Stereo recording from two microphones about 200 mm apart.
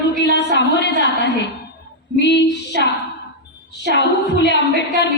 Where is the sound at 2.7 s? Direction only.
45° right (ahead or behind).